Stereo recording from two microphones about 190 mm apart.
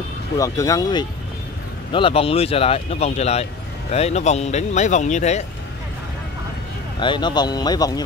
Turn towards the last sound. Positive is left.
turn(degrees=20)  # may be behind; listen again after turning